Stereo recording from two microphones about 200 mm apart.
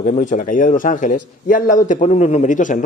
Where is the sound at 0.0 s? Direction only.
40° left (ahead or behind).